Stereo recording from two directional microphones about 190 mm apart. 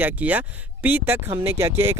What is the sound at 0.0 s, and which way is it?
Speech, 10° right (ahead or behind).